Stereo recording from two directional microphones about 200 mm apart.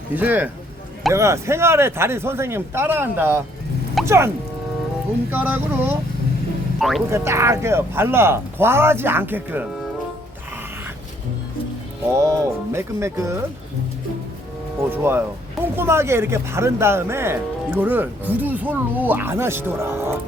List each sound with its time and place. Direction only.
0.2 s speech: 10° right (ahead or behind)
5.3 s speech: 10° right (ahead or behind)
7.1 s speech: 15° right (ahead or behind)
12.1 s speech: 15° right (ahead or behind)
14.8 s speech: 10° right (ahead or behind)